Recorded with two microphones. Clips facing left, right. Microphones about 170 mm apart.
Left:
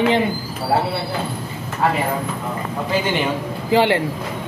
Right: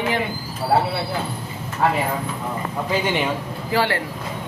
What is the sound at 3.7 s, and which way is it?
Speech, 20° left (ahead or behind).